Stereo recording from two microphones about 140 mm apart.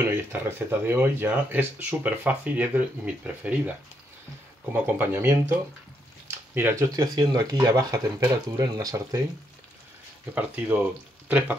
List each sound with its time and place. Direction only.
0.1 s speech: 15° right (ahead or behind)
4.7 s speech: 15° right (ahead or behind)
10.3 s speech: 15° right (ahead or behind)
11.2 s frying: 10° right (ahead or behind)